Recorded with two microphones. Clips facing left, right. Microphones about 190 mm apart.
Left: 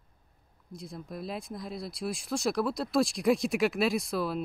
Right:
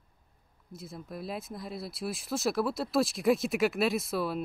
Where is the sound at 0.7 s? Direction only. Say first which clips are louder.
Left 1 dB; centre (ahead or behind).